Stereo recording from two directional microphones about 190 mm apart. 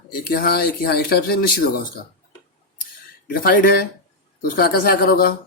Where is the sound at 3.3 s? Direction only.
50° left (ahead or behind).